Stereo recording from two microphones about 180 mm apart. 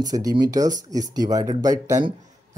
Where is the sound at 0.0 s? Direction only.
20° right (ahead or behind).